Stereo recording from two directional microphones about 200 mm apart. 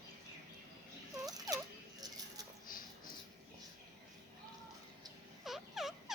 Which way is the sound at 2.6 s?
45° left (ahead or behind).